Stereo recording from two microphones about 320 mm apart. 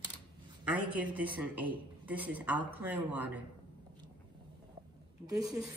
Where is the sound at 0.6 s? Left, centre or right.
Centre.